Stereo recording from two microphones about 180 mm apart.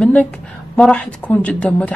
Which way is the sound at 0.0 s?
5° left (ahead or behind).